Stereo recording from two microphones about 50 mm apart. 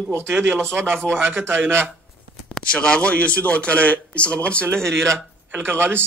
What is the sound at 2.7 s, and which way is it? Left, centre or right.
Speech, left.